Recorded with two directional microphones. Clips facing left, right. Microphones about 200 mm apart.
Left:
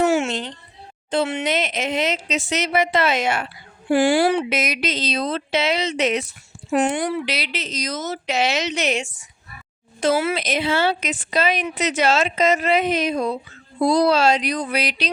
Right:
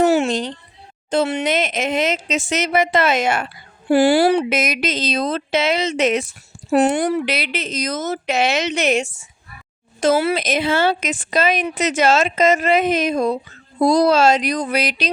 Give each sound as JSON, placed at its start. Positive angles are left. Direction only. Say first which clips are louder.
{"t": 0.0, "sound": "a sound", "louder": "right 3 dB", "side_deg": -35}
{"t": 1.1, "sound": "speech", "louder": "right 3 dB", "side_deg": -40}
{"t": 10.0, "sound": "speech", "louder": "right 3 dB", "side_deg": -40}